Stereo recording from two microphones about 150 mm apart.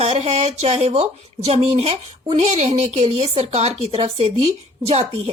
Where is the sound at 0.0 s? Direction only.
45° right (ahead or behind).